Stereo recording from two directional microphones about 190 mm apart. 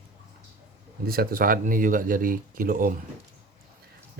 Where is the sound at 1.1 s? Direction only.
50° right (ahead or behind).